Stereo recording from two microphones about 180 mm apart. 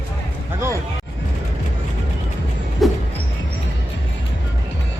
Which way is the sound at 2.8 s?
Centre (ahead or behind).